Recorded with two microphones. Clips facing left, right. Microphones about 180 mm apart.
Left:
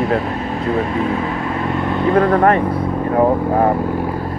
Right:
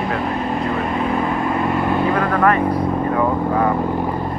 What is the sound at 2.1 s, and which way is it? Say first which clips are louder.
Speech: left 8 dB; 30° left (ahead or behind).